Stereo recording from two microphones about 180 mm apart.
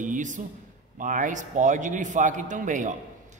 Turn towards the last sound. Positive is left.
turn(degrees=-45)  # may be behind; listen again after turning